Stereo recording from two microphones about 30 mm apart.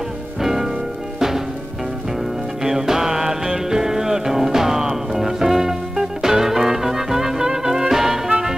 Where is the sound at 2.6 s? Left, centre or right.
Centre.